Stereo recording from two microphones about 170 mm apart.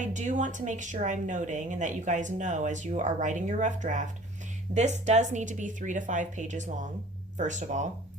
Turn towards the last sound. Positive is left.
turn(degrees=-45)  # may be behind; listen again after turning